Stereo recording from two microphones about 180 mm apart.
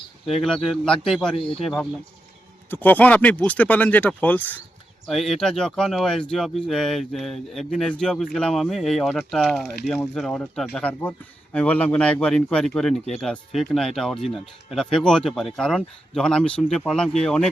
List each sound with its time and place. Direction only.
0.3 s speech: centre (ahead or behind)
1.4 s speech: 30° left (ahead or behind)
1.6 s speech: 5° left (ahead or behind)